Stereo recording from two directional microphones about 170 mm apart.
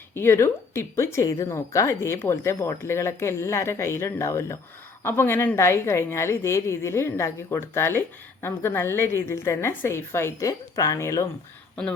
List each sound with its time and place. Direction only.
0.1 s a woman's voice: 15° left (ahead or behind)